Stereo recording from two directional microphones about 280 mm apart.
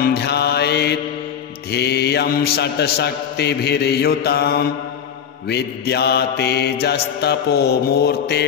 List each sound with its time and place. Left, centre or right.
0.0 s mantra: left